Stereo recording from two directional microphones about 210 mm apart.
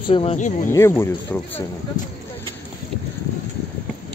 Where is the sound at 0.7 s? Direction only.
10° left (ahead or behind).